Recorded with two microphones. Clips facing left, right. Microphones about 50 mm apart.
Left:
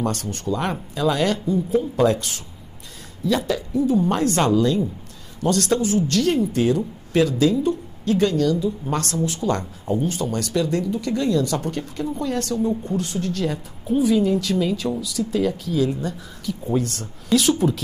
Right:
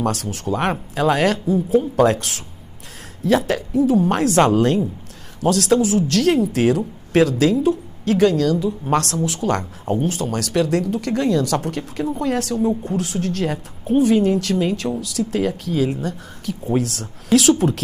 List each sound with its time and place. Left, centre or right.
0.0 s a woman's voice: right
0.6 s a woman's voice: right
5.4 s speech: right
5.9 s a woman's voice: right
13.9 s speech: right
15.9 s a woman's voice: right